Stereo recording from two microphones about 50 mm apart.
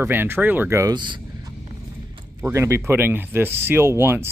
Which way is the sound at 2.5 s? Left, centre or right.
Right.